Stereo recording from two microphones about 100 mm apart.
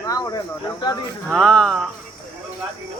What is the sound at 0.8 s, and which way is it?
Speech, 55° left (ahead or behind).